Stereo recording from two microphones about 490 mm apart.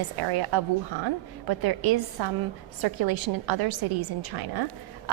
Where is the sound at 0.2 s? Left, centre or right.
Right.